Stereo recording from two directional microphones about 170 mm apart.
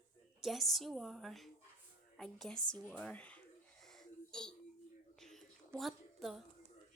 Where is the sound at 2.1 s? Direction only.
Centre (ahead or behind).